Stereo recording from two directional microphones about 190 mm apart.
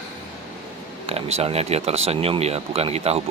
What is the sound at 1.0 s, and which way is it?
Speech, 35° right (ahead or behind).